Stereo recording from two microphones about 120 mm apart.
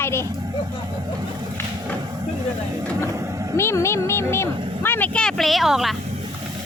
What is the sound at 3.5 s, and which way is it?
Speech, 20° left (ahead or behind).